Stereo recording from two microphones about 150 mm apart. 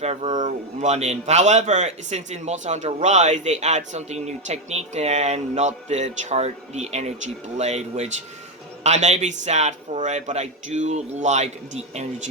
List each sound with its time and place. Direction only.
0.0 s a man's voice: 45° right (ahead or behind)